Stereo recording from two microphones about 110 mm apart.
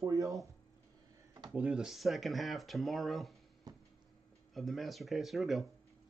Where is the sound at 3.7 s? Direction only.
35° right (ahead or behind).